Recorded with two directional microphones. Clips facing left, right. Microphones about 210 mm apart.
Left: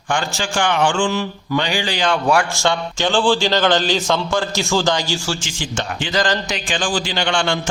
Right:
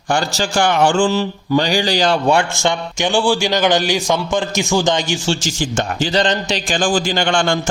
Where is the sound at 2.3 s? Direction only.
25° right (ahead or behind).